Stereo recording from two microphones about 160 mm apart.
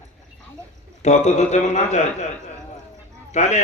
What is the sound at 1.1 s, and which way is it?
A man's voice, 45° left (ahead or behind).